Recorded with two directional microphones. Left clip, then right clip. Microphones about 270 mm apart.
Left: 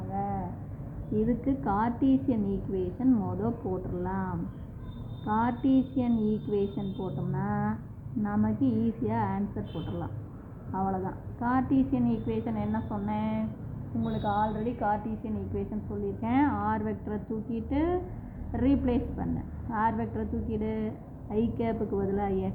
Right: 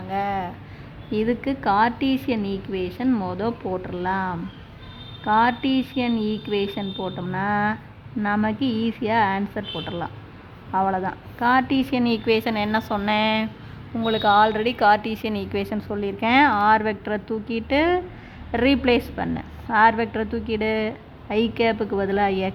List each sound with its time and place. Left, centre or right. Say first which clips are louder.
0.1 s a sound: right 9 dB; right
1.3 s a woman's voice: right 10 dB; right
10.7 s a woman's voice: right 10 dB; right
16.2 s a woman's voice: right 12 dB; right